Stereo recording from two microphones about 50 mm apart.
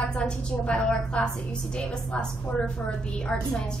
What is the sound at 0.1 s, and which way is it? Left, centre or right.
A woman's voice, centre.